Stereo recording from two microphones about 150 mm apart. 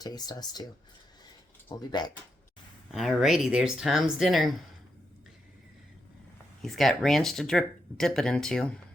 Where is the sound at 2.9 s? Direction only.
Centre (ahead or behind).